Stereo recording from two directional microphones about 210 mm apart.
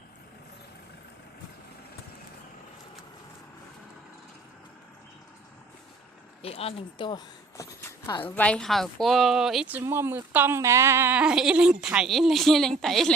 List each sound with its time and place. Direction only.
6.4 s speech: 30° left (ahead or behind)
8.4 s speech: 5° left (ahead or behind)